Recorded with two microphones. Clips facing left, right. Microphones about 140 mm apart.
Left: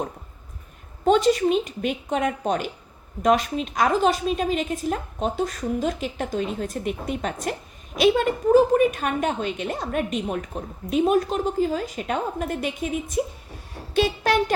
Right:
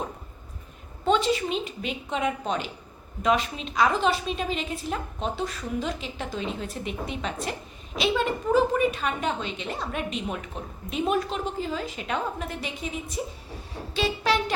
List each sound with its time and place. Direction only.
1.0 s a woman's voice: 45° left (ahead or behind)